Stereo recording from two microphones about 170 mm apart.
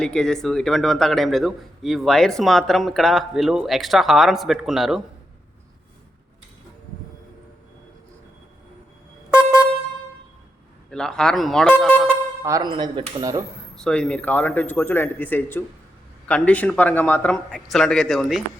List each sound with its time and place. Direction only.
0.0 s a man's voice: 5° left (ahead or behind)
9.3 s vehicle horn: 10° right (ahead or behind)
10.9 s a man's voice: 5° left (ahead or behind)
12.4 s speech: 20° right (ahead or behind)
13.7 s a man's voice: 5° left (ahead or behind)